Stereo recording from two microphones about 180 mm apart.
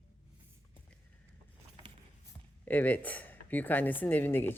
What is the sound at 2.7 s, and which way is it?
Speech, 10° left (ahead or behind).